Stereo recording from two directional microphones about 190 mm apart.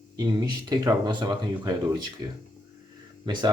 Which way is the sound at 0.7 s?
20° right (ahead or behind).